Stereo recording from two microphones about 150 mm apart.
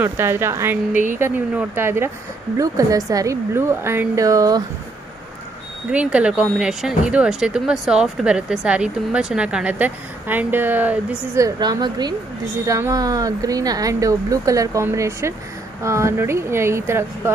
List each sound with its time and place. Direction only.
0.0 s speech: 15° right (ahead or behind)
5.9 s speech: 5° right (ahead or behind)
11.4 s speech: 25° right (ahead or behind)